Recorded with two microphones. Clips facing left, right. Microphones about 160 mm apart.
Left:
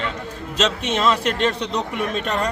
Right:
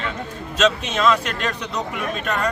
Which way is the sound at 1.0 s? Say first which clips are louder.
Even; 30° left (ahead or behind).